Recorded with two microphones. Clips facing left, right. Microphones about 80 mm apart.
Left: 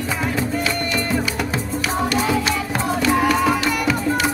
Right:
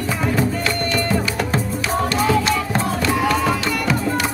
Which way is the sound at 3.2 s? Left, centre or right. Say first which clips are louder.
Left 1 dB; centre.